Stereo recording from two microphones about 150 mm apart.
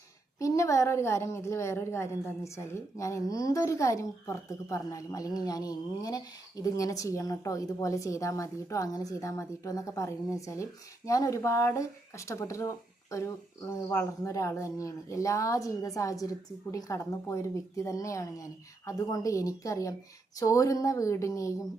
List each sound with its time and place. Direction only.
0.3 s a woman's voice: 20° left (ahead or behind)